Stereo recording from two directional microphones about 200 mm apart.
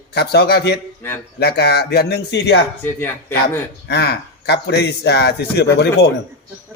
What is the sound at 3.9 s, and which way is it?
A man's voice, 55° left (ahead or behind).